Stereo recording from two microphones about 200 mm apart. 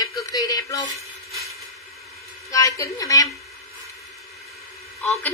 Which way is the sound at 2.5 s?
15° left (ahead or behind).